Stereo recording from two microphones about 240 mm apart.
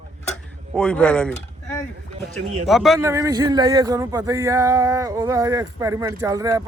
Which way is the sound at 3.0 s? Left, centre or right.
Centre.